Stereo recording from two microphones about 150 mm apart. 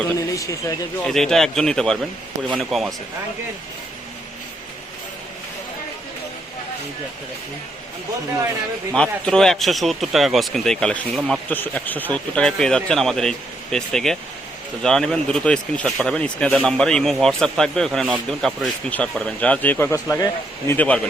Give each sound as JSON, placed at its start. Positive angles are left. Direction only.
{"t": 0.2, "sound": "speech", "side_deg": 25}
{"t": 1.0, "sound": "speech", "side_deg": 5}
{"t": 8.9, "sound": "speech", "side_deg": 5}
{"t": 20.7, "sound": "speech", "side_deg": 10}